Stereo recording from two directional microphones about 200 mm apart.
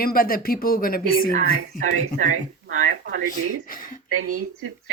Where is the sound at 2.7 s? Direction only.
85° right.